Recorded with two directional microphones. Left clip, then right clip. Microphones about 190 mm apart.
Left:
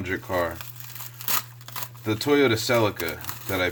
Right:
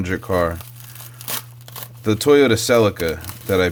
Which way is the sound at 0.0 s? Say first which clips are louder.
Right 6 dB; 55° right (ahead or behind).